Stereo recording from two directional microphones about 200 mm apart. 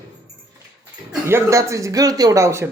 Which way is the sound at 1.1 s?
10° right (ahead or behind).